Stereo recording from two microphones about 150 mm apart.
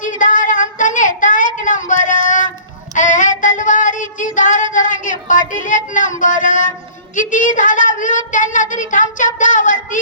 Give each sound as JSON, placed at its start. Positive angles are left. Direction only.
{"t": 0.0, "sound": "a sound", "side_deg": 60}
{"t": 2.9, "sound": "child singing", "side_deg": 55}
{"t": 5.3, "sound": "speech", "side_deg": 60}